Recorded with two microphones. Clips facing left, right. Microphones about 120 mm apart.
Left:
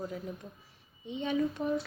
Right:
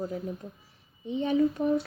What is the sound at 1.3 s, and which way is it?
Speech, 35° right (ahead or behind).